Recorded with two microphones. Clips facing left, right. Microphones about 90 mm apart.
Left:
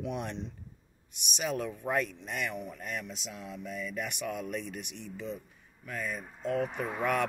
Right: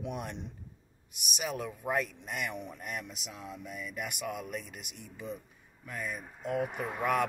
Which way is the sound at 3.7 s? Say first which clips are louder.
Left 4 dB; 10° right (ahead or behind).